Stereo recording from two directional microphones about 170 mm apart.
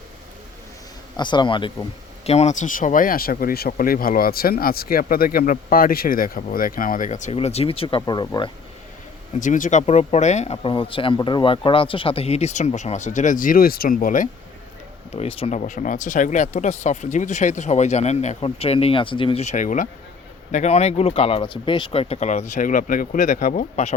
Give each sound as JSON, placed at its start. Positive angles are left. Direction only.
{"t": 1.1, "sound": "speech", "side_deg": 25}
{"t": 9.4, "sound": "speech", "side_deg": 50}
{"t": 15.1, "sound": "speech", "side_deg": 35}